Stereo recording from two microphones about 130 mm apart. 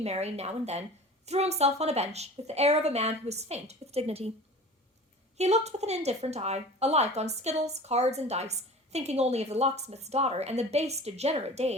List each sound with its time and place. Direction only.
0.0 s a woman's voice: 55° right (ahead or behind)
5.4 s a woman's voice: 55° right (ahead or behind)